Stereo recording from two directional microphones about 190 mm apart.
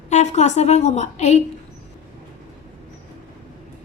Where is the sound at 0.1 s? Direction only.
35° left (ahead or behind).